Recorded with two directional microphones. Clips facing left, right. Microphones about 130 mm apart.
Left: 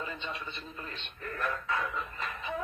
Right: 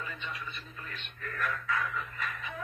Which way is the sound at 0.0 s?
25° left (ahead or behind).